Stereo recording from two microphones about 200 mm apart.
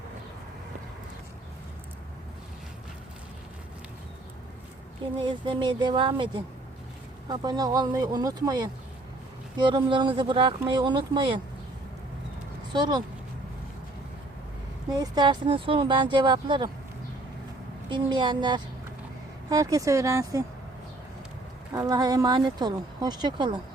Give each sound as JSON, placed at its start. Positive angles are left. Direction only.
{"t": 5.2, "sound": "speech", "side_deg": -25}
{"t": 12.7, "sound": "speech", "side_deg": -20}
{"t": 14.8, "sound": "speech", "side_deg": -20}
{"t": 17.8, "sound": "speech", "side_deg": -25}
{"t": 21.7, "sound": "speech", "side_deg": -15}